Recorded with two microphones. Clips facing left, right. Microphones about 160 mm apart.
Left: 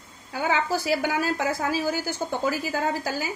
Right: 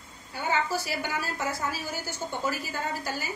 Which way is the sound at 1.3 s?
90° left.